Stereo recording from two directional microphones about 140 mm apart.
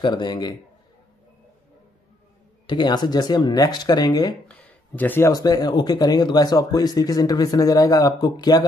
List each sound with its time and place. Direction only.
0.0 s a man's voice: 30° left (ahead or behind)
2.6 s speech: 30° left (ahead or behind)
4.5 s a sound: 10° left (ahead or behind)
5.3 s speech: 30° left (ahead or behind)